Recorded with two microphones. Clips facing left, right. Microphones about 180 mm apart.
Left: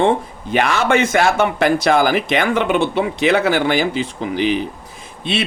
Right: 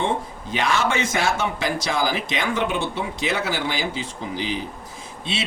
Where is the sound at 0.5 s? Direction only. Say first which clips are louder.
Left 6 dB; 60° left (ahead or behind).